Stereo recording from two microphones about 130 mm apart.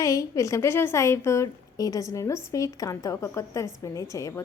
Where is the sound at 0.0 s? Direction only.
25° left (ahead or behind).